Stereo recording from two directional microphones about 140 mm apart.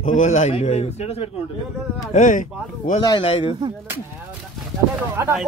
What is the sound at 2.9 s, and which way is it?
Speech, 75° left (ahead or behind).